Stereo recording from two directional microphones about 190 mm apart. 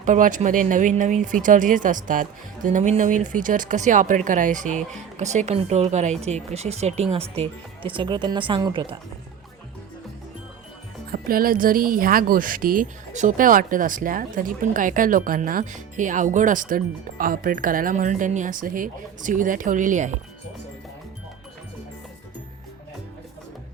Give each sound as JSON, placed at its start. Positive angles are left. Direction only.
{"t": 0.0, "sound": "speech", "side_deg": -40}
{"t": 11.1, "sound": "speech", "side_deg": -50}